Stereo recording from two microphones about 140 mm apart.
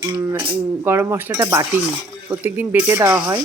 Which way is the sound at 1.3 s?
25° right (ahead or behind).